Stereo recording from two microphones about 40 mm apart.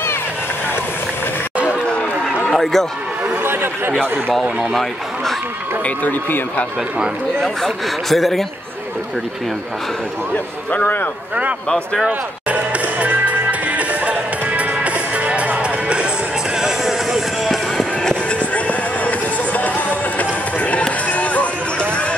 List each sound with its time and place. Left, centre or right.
1.9 s run: left
2.5 s a man's voice: centre
3.4 s speech: right
7.3 s speech: centre
10.7 s speech: left
12.1 s music: right
16.5 s music: centre
18.3 s music: left